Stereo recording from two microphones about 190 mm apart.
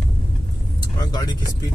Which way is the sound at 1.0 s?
20° left (ahead or behind).